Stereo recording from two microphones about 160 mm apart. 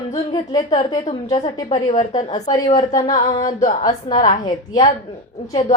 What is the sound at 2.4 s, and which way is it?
Speech, 25° left (ahead or behind).